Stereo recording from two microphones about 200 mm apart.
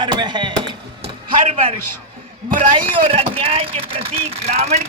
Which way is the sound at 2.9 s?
30° right (ahead or behind).